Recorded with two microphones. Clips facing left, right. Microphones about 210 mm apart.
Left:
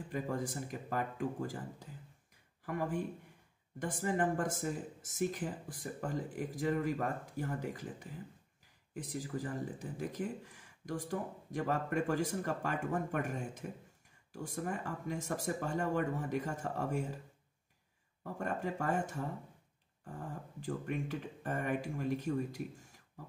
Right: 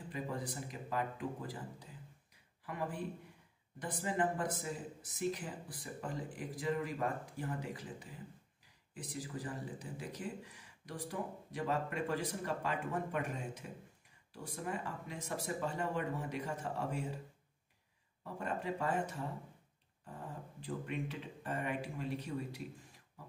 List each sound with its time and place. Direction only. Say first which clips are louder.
0.1 s speech: left 4 dB; 45° left (ahead or behind)
18.2 s speech: left 2 dB; 45° left (ahead or behind)
20.6 s speech: left 2 dB; 45° left (ahead or behind)